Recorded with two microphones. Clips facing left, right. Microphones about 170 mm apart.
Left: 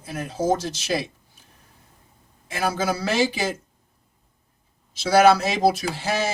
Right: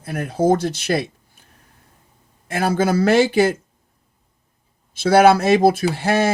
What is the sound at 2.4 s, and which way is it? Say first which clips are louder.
Speech: right 5 dB; 55° right (ahead or behind).